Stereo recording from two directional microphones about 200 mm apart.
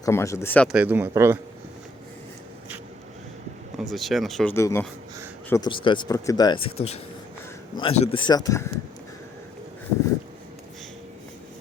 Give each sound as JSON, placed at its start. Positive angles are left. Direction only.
{"t": 0.0, "sound": "speech", "side_deg": 15}
{"t": 0.7, "sound": "speech", "side_deg": -10}
{"t": 3.8, "sound": "speech", "side_deg": 0}
{"t": 4.5, "sound": "speech", "side_deg": 15}
{"t": 8.3, "sound": "speech", "side_deg": 20}